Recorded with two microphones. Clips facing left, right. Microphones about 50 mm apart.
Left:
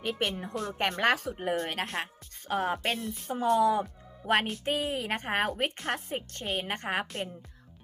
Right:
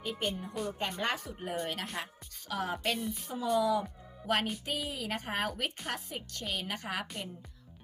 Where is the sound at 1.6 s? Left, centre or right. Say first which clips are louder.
Left 4 dB; left.